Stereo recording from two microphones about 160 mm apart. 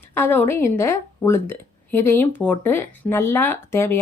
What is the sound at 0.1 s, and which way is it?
A woman's voice, 15° left (ahead or behind).